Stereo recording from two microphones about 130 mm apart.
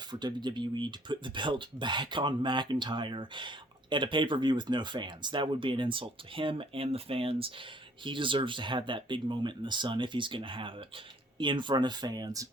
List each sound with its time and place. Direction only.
0.1 s speech: 35° right (ahead or behind)